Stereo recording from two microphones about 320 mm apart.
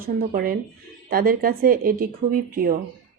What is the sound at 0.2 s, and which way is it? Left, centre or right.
Speech, right.